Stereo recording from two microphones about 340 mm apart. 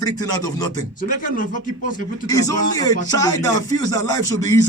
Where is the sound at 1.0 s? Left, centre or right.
Left.